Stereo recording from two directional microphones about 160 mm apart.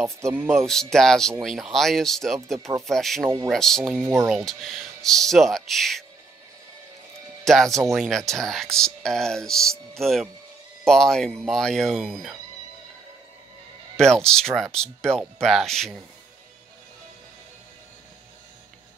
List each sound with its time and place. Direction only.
0.2 s speech: 15° right (ahead or behind)
0.6 s speech: 5° left (ahead or behind)
7.4 s speech: centre (ahead or behind)
13.9 s speech: 5° left (ahead or behind)